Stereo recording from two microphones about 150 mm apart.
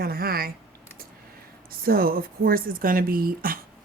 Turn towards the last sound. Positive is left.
turn(degrees=-75)  # may be behind; listen again after turning